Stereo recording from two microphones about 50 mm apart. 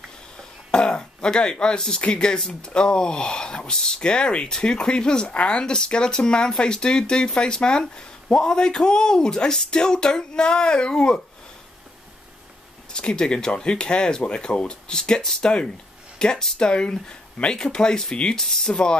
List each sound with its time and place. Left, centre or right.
0.7 s speech: centre
12.9 s speech: centre